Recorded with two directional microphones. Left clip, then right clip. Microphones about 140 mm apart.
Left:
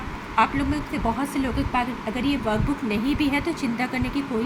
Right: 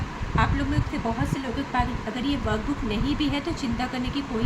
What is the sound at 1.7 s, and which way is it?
Speech, 25° left (ahead or behind).